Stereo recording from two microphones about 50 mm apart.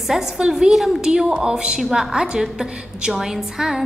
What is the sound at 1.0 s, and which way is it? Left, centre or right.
A woman's voice, centre.